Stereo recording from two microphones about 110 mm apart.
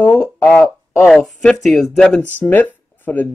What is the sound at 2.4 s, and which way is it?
Speech, 15° left (ahead or behind).